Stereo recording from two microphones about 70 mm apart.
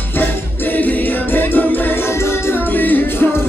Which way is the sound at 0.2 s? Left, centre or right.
Left.